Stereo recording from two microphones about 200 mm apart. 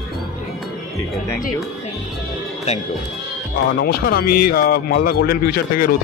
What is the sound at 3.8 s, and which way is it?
A man's voice, 50° left (ahead or behind).